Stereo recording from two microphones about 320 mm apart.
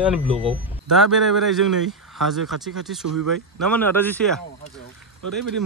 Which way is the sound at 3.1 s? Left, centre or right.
Right.